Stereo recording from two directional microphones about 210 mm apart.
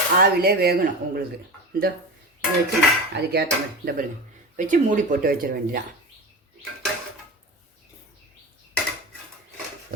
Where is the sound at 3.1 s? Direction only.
50° right (ahead or behind).